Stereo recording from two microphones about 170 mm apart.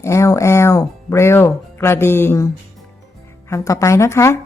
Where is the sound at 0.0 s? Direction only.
15° left (ahead or behind).